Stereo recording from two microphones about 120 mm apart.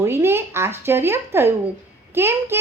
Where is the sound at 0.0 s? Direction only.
20° right (ahead or behind).